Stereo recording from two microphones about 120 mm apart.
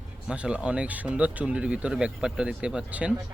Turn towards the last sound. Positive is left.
turn(degrees=-10)  # may be behind; listen again after turning